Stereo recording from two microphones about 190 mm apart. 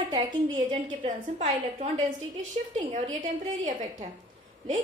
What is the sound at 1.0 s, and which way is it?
A woman's voice, 40° right (ahead or behind).